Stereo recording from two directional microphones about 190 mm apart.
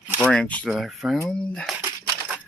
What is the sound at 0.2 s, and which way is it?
Speech, 5° left (ahead or behind).